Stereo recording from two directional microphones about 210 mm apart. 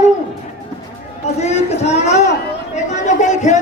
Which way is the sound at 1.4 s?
30° left (ahead or behind).